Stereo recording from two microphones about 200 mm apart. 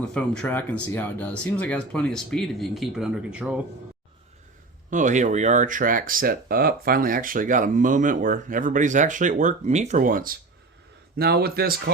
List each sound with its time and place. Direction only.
0.1 s speech: 5° left (ahead or behind)
4.9 s speech: 40° right (ahead or behind)